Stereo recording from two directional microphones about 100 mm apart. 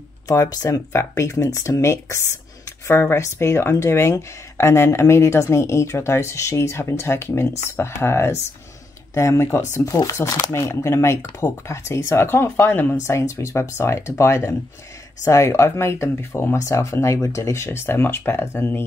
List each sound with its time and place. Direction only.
0.3 s speech: 35° left (ahead or behind)